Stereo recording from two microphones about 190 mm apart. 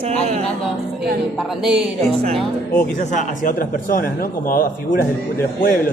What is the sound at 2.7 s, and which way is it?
Speech, 45° left (ahead or behind).